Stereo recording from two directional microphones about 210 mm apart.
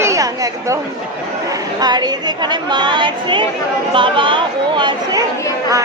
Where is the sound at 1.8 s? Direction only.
20° right (ahead or behind).